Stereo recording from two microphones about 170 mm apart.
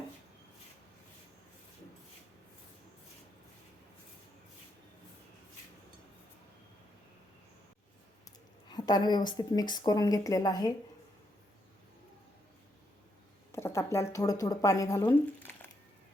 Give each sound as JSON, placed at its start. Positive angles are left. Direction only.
{"t": 8.7, "sound": "speech", "side_deg": 25}
{"t": 13.5, "sound": "speech", "side_deg": 15}